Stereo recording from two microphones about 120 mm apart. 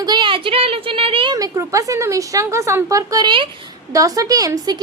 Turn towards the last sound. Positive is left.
turn(degrees=-30)  # may be behind; listen again after turning